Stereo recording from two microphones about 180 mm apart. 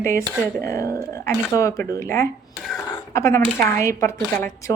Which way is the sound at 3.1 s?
15° left (ahead or behind).